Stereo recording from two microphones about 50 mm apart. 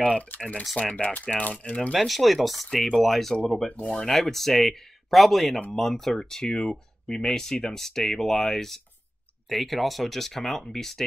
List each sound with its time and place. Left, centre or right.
0.2 s speech: left
2.0 s speech: centre
3.3 s speech: centre